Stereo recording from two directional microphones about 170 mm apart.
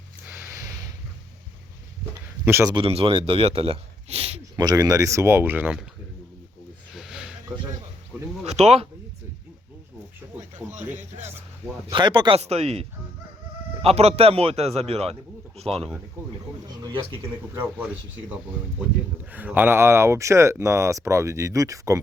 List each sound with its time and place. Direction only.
0.3 s a sound: 15° right (ahead or behind)
2.4 s speech: 15° right (ahead or behind)
2.7 s speech: 35° right (ahead or behind)
4.5 s speech: 25° right (ahead or behind)
6.9 s a sound: centre (ahead or behind)
8.4 s speech: 40° right (ahead or behind)
10.6 s speech: 5° left (ahead or behind)
11.9 s speech: 30° right (ahead or behind)
13.8 s speech: 40° right (ahead or behind)
16.6 s speech: 20° right (ahead or behind)
19.3 s speech: 10° right (ahead or behind)